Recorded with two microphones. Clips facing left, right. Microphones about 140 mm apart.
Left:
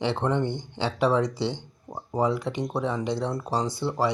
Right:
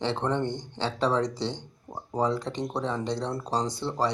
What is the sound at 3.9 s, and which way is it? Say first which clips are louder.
Speech: left 3 dB; 10° left (ahead or behind).